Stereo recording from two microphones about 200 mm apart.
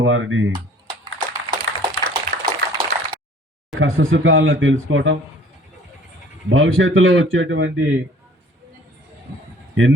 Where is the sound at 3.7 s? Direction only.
80° right.